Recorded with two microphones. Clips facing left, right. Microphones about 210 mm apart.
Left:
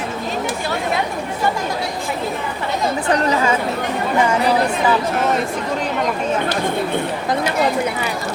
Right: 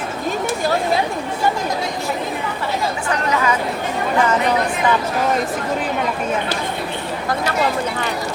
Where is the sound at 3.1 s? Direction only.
30° left (ahead or behind).